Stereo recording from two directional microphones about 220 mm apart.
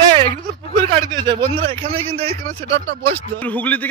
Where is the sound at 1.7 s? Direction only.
25° right (ahead or behind).